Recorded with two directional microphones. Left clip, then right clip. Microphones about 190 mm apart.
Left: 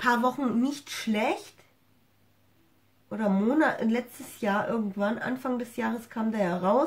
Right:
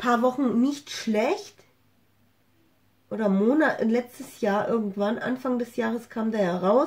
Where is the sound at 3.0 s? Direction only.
Centre (ahead or behind).